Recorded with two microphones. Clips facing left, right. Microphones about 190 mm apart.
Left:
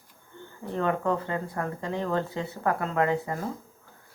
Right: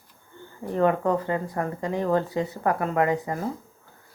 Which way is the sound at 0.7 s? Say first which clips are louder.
Right 5 dB; 15° right (ahead or behind).